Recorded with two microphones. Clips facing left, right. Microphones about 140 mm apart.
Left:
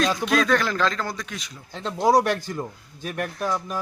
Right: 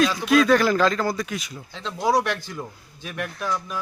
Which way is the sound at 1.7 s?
45° left (ahead or behind).